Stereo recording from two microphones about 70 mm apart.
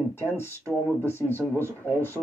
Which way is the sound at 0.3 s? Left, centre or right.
Left.